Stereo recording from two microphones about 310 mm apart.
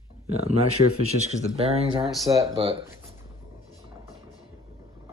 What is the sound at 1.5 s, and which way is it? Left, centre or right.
Speech, centre.